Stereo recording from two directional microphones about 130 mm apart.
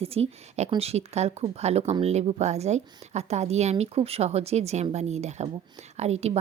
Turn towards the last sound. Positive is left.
turn(degrees=-50)  # may be behind; listen again after turning